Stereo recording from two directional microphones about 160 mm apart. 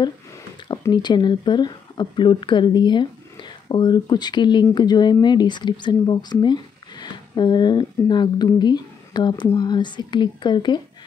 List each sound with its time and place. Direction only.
0.7 s a woman's voice: 30° left (ahead or behind)